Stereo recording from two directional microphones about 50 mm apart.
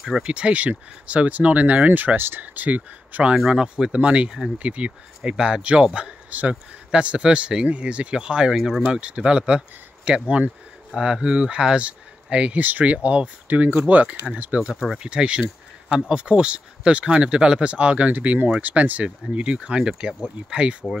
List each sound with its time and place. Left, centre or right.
0.2 s speech: right
3.3 s speech: centre
14.7 s speech: centre
15.0 s speech: right